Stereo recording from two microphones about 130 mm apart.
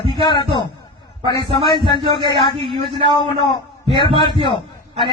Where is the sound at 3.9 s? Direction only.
40° left (ahead or behind).